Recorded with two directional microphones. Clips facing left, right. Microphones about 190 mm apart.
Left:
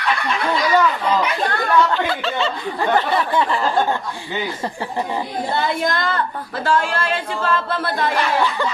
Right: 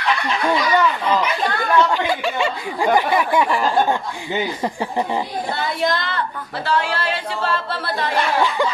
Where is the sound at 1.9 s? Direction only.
15° right (ahead or behind).